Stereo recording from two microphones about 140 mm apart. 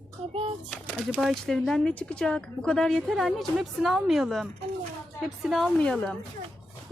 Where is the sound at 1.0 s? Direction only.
Centre (ahead or behind).